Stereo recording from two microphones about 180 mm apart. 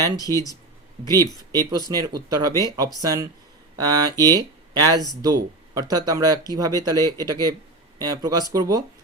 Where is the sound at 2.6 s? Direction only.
20° right (ahead or behind).